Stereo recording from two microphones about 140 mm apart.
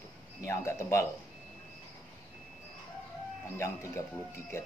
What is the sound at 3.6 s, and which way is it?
Speech, 20° left (ahead or behind).